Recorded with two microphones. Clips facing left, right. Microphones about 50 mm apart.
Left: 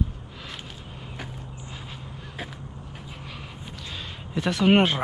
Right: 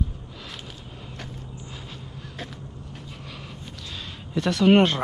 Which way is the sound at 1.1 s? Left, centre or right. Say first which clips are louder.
Left 1 dB; centre.